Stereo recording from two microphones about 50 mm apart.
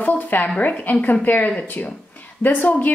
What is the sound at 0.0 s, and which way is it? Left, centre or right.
A woman's voice, left.